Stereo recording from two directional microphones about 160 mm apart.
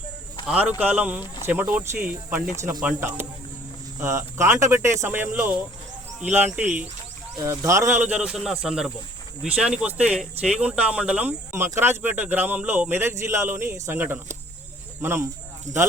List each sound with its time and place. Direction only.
0.4 s speech: 5° right (ahead or behind)
8.0 s speech: 5° right (ahead or behind)
15.7 s speech: 50° right (ahead or behind)